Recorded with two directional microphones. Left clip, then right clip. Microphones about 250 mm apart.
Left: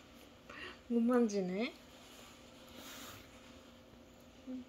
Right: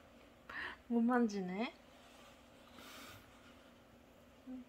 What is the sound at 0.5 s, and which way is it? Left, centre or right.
Speech, right.